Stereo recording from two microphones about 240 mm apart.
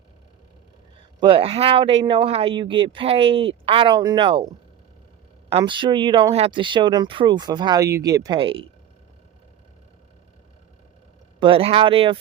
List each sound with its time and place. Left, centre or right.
1.2 s speech: right
11.3 s speech: right